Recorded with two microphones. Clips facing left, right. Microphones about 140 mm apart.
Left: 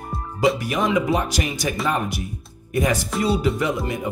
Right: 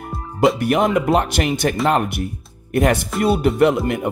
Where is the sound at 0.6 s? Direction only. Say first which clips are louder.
Right 4 dB; 60° right (ahead or behind).